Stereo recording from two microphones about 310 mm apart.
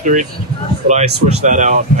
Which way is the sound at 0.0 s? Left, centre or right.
Right.